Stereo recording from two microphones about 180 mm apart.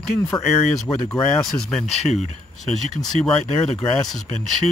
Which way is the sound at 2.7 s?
Centre (ahead or behind).